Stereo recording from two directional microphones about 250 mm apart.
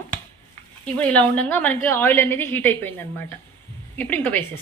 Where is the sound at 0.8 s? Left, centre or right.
Centre.